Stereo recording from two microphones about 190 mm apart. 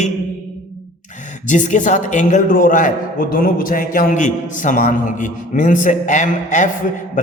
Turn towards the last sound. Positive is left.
turn(degrees=40)  # may be behind; listen again after turning